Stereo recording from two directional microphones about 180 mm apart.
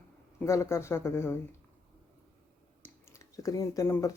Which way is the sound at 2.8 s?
15° left (ahead or behind).